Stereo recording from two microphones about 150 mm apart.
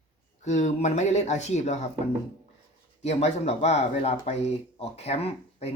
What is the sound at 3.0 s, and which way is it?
Speech, 45° left (ahead or behind).